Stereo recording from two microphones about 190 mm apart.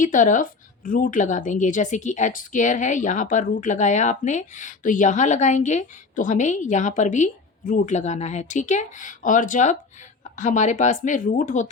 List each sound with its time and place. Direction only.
0.0 s speech: 45° left (ahead or behind)